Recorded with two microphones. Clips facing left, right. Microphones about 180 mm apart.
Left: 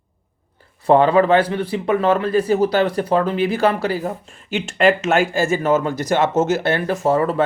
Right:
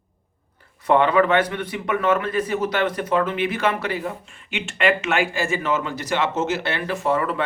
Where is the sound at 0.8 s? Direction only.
35° left (ahead or behind).